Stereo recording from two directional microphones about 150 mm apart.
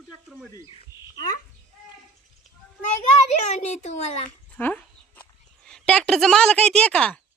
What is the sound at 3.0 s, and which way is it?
A child's voice, 50° left (ahead or behind).